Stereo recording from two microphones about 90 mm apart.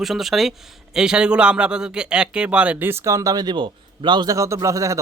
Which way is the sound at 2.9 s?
30° right (ahead or behind).